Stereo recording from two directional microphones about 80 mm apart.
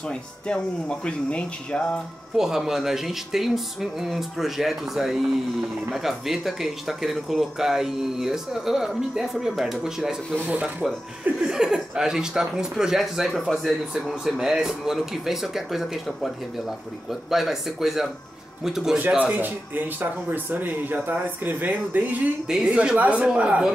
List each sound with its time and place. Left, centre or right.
0.1 s speech: centre
2.3 s speech: centre
18.9 s speech: centre
22.5 s speech: centre